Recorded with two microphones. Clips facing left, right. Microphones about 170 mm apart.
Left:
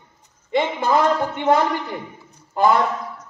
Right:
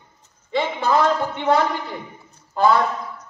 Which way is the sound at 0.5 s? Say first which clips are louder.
Left 1 dB; 15° left (ahead or behind).